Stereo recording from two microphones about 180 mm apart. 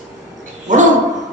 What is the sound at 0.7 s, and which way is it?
Speech, 45° right (ahead or behind).